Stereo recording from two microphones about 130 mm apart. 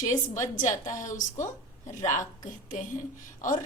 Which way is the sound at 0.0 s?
25° left (ahead or behind).